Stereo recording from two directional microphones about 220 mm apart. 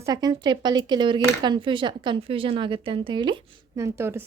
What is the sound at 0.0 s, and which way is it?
Speech, 20° right (ahead or behind).